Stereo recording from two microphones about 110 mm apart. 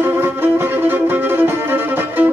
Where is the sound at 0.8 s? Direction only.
20° right (ahead or behind).